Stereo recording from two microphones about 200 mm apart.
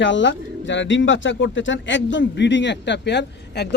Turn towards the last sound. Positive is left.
turn(degrees=60)  # may be behind; listen again after turning